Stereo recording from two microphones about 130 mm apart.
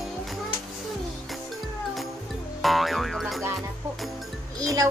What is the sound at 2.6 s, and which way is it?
Music, centre (ahead or behind).